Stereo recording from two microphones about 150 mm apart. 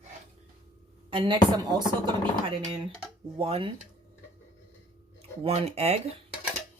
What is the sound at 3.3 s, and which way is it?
Speech, 40° right (ahead or behind).